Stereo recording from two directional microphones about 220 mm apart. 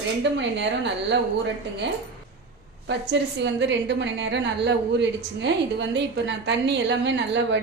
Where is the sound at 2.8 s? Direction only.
55° right (ahead or behind).